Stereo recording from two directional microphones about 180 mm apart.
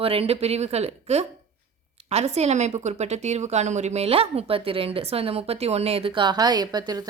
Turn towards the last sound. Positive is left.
turn(degrees=-20)  # may be behind; listen again after turning